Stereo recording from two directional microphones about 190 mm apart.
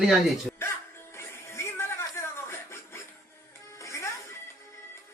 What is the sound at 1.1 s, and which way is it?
Music, 15° left (ahead or behind).